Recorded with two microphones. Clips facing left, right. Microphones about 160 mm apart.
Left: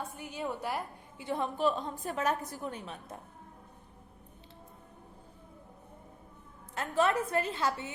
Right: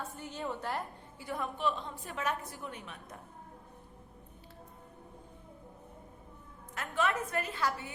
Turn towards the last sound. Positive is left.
turn(degrees=25)  # may be behind; listen again after turning